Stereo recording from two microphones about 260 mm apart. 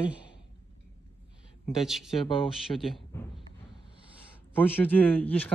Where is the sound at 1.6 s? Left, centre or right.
Centre.